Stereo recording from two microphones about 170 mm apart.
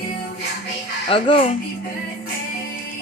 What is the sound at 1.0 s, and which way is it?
Speech, 35° left (ahead or behind).